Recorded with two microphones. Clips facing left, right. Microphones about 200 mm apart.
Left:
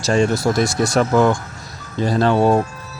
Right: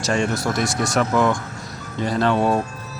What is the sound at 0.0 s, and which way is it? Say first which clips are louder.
Speech: left 5 dB; 30° left (ahead or behind).